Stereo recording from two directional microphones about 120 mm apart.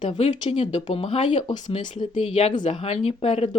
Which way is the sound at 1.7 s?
45° left (ahead or behind).